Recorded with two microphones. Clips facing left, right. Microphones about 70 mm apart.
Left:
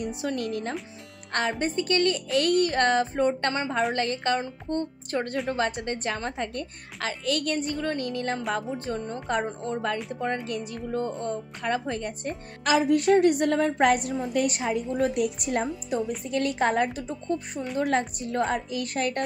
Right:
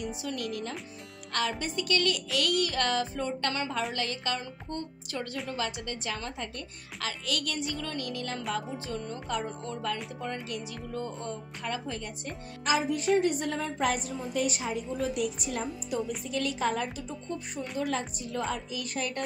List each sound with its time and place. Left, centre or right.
0.0 s a child's voice: left
3.5 s a woman's voice: left
3.9 s a child's voice: left
8.5 s speech: left
9.0 s a child's voice: left
12.6 s a woman's voice: left
15.9 s a child's voice: left